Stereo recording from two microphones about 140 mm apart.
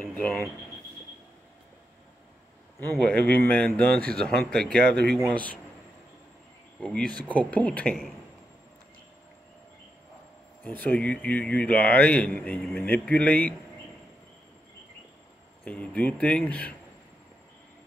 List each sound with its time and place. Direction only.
0.0 s a sound: 15° left (ahead or behind)
2.8 s a man's voice: 10° left (ahead or behind)
6.8 s a man's voice: 5° left (ahead or behind)
10.8 s a man's voice: 10° left (ahead or behind)
15.6 s a man's voice: 10° left (ahead or behind)